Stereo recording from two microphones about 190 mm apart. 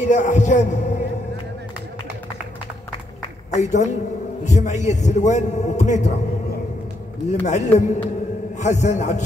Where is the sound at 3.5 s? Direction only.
35° left (ahead or behind).